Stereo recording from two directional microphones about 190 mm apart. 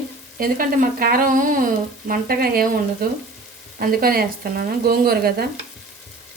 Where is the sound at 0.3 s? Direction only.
50° right (ahead or behind).